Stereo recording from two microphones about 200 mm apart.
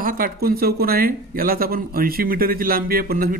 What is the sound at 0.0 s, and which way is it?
Speech, 45° right (ahead or behind).